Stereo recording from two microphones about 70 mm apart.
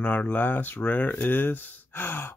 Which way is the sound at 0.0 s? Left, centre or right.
Left.